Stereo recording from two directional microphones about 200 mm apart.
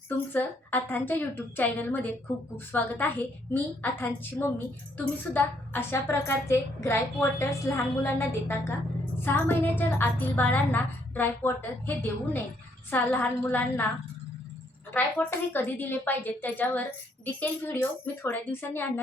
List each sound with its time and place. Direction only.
0.1 s a woman's voice: 10° left (ahead or behind)
14.9 s a woman's voice: 10° left (ahead or behind)